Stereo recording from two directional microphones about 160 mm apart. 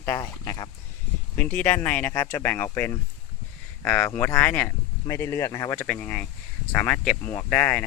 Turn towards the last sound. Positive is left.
turn(degrees=10)  # may be behind; listen again after turning